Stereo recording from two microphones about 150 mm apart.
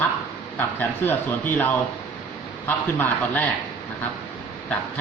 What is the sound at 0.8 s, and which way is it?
Speech, 15° left (ahead or behind).